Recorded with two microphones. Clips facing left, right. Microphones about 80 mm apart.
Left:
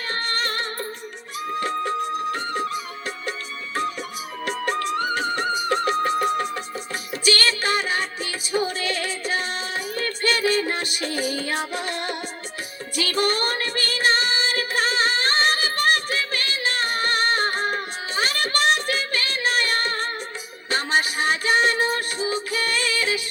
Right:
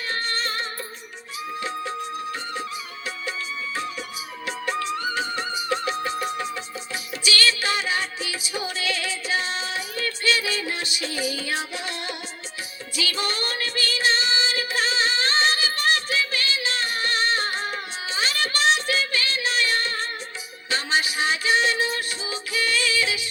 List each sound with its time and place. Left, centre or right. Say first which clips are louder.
0.1 s music: left 2 dB; left
4.4 s music: left 2 dB; left
13.0 s female singing: left 5 dB; left
20.7 s music: left 2 dB; left